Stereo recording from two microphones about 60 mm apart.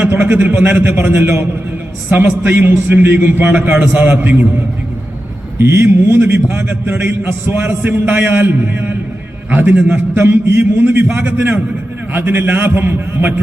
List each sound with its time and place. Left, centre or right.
0.0 s a man's voice: right
5.5 s a man's voice: right
9.5 s a man's voice: right
9.7 s a man's voice: right
10.4 s a man's voice: right